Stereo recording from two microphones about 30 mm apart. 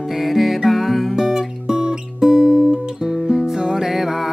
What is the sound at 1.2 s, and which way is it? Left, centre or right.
Music, centre.